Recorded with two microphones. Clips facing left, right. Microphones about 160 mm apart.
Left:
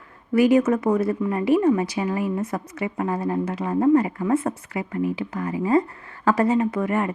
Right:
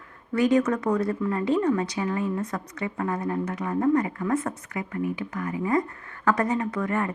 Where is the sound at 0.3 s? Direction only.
25° left (ahead or behind).